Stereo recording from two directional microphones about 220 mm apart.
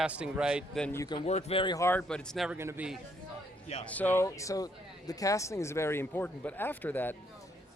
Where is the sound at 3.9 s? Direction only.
5° left (ahead or behind).